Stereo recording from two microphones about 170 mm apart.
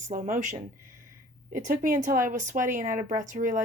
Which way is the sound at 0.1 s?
50° right (ahead or behind).